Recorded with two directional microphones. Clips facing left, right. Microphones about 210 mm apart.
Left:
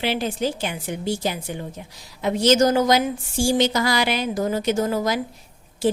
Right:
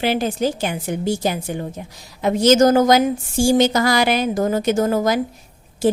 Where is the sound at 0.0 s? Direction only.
45° right (ahead or behind).